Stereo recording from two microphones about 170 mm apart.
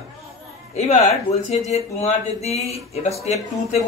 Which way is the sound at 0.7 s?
40° left (ahead or behind).